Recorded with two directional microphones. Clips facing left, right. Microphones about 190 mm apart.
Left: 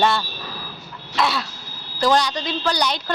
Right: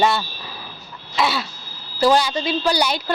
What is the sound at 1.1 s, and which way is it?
Throat clearing, centre (ahead or behind).